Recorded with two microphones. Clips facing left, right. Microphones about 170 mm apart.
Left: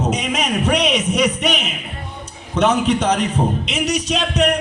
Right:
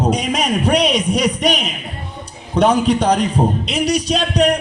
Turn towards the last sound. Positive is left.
turn(degrees=-35)  # may be behind; listen again after turning